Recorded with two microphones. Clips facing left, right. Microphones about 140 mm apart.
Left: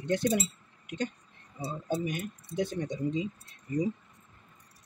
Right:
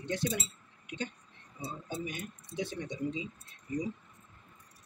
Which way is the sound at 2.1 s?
50° left (ahead or behind).